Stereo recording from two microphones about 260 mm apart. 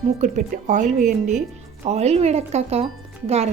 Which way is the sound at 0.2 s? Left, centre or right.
Right.